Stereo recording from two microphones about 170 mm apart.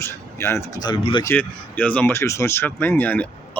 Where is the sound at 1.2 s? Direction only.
10° left (ahead or behind).